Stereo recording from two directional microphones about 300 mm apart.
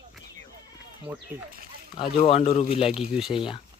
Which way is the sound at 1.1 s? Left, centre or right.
Centre.